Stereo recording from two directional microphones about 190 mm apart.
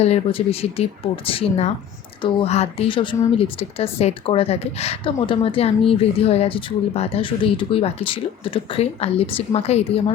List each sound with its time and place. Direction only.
0.0 s a woman's voice: 30° left (ahead or behind)